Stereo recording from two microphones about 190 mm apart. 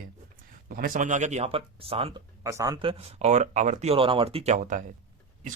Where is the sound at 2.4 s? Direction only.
15° right (ahead or behind); by 4.8 s 40° right (ahead or behind).